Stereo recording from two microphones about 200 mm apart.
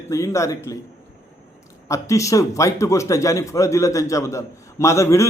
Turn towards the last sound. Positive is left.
turn(degrees=15)  # may be behind; listen again after turning